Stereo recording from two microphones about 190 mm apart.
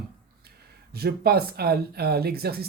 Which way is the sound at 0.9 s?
55° right (ahead or behind).